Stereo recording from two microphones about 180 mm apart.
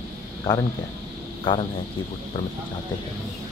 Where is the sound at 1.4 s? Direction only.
30° left (ahead or behind).